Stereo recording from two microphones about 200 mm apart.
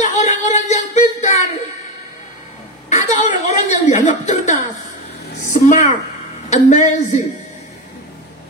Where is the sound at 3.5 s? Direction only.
35° left (ahead or behind).